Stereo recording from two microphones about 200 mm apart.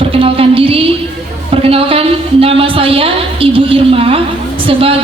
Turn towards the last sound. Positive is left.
turn(degrees=-30)  # may be behind; listen again after turning